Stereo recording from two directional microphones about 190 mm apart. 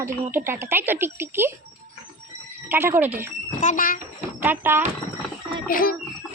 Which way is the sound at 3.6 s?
45° left (ahead or behind).